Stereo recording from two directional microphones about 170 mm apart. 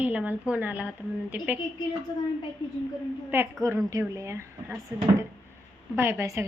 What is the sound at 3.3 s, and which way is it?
Speech, 15° right (ahead or behind).